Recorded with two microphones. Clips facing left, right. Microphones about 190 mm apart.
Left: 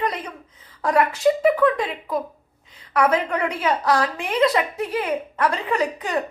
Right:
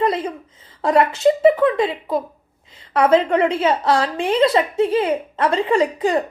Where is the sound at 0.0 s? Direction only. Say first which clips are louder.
Right 6 dB; 25° right (ahead or behind).